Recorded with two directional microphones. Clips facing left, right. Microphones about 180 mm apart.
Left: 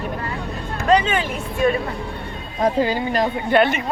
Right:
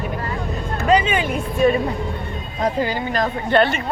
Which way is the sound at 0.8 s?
10° right (ahead or behind).